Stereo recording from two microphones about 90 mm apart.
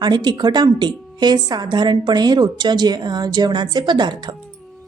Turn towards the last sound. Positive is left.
turn(degrees=-55)  # may be behind; listen again after turning